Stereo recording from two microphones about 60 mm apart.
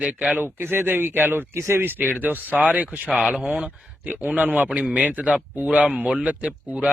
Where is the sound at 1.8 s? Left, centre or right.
Right.